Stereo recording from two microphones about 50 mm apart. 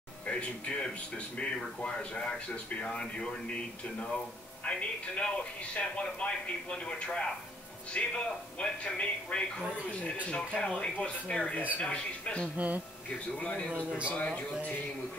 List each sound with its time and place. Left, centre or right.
0.3 s a man's voice: left
4.6 s a man's voice: left
12.5 s speech: right
13.4 s a man's voice: left
13.7 s speech: right
14.1 s a man's voice: left